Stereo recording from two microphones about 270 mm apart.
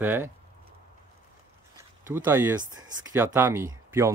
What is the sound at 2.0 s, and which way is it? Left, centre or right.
Speech, centre.